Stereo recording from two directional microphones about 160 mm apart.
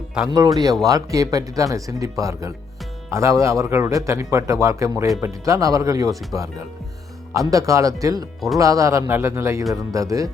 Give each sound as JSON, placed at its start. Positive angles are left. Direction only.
{"t": 0.3, "sound": "a man's voice", "side_deg": -25}